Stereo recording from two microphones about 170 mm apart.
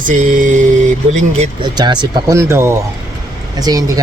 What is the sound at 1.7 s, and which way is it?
Speech, 25° right (ahead or behind).